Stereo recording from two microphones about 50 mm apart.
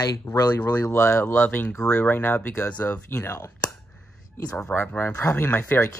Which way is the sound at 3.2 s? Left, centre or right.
Left.